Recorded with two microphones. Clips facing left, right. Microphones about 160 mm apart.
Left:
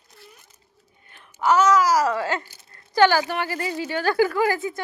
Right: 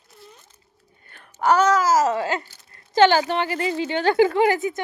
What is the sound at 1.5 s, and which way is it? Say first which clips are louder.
Speech: even; 30° right (ahead or behind).